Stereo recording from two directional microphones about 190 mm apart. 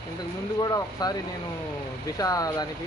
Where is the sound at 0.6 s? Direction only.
20° left (ahead or behind).